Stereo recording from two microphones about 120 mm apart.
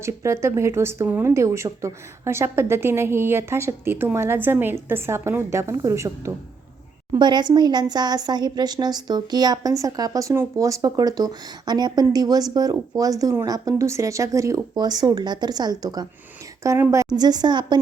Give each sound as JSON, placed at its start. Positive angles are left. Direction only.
{"t": 0.0, "sound": "a woman's voice", "side_deg": -25}
{"t": 7.2, "sound": "speech", "side_deg": -40}
{"t": 16.6, "sound": "speech", "side_deg": -20}